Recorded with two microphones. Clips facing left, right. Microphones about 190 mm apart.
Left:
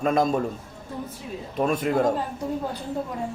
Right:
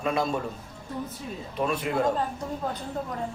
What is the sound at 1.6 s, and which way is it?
Speech, 45° left (ahead or behind).